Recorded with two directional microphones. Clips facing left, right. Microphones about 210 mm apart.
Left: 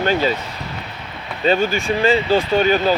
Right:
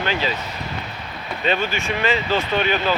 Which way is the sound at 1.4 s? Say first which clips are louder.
Left 6 dB; 40° left (ahead or behind).